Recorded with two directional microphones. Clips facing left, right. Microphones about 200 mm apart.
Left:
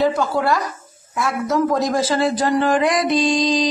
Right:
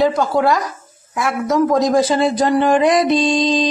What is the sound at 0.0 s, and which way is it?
A man's voice, 15° right (ahead or behind).